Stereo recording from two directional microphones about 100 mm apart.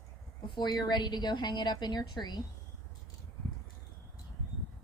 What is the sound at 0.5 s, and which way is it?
A woman's voice, 45° left (ahead or behind).